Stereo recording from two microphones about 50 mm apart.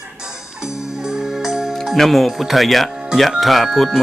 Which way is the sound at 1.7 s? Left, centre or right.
Centre.